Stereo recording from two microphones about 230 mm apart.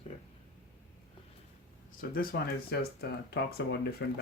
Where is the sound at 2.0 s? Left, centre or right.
Left.